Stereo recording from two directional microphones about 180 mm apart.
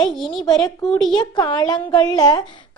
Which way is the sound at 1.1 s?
25° left (ahead or behind).